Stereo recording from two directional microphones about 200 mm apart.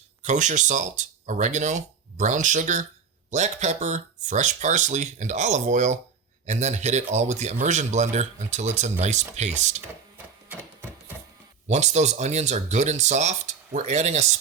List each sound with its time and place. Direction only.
0.2 s a man's voice: 35° right (ahead or behind)
11.7 s a man's voice: 35° right (ahead or behind)